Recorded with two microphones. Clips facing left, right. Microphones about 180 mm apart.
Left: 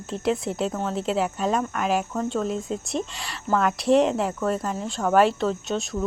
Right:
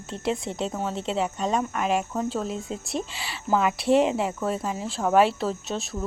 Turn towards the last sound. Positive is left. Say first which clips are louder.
# left 4 dB
turn(degrees=-5)  # may be behind; listen again after turning